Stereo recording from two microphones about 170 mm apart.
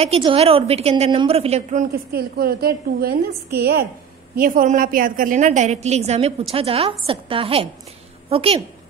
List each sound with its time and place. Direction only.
0.0 s a woman's voice: 35° right (ahead or behind)
2.1 s a woman's voice: 65° right (ahead or behind)
4.4 s a woman's voice: 55° right (ahead or behind); by 8.5 s 35° right (ahead or behind)